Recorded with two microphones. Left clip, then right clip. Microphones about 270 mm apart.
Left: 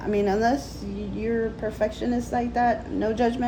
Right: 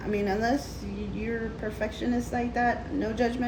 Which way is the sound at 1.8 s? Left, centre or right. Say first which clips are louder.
Left 4 dB; centre.